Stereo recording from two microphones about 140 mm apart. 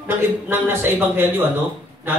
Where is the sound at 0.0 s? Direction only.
15° right (ahead or behind).